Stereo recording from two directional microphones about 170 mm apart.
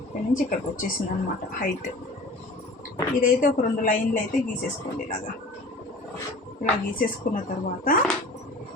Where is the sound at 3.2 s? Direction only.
50° left (ahead or behind).